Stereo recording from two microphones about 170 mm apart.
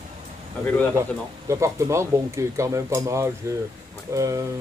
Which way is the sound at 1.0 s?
15° right (ahead or behind).